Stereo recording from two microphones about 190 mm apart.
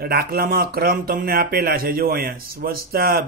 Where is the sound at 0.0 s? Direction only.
55° right (ahead or behind).